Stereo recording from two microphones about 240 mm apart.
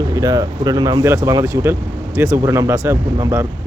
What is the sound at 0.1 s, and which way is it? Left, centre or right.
Speech, centre.